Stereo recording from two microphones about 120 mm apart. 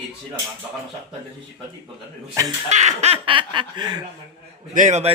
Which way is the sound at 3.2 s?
45° right (ahead or behind).